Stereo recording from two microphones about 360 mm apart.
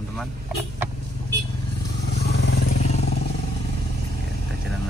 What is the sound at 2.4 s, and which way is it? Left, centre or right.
Vehicle, left.